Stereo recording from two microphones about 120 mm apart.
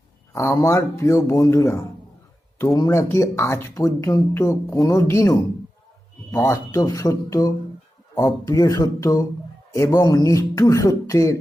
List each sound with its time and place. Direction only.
0.3 s speech: 25° left (ahead or behind)
6.3 s speech: 25° left (ahead or behind)